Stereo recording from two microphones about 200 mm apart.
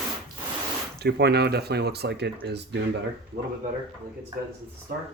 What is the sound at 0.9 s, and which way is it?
Speech, 55° right (ahead or behind).